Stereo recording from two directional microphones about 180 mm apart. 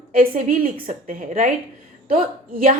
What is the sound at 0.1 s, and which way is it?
A woman's voice, 50° right (ahead or behind).